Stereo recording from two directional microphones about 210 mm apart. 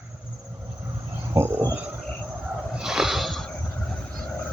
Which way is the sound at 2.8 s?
5° right (ahead or behind).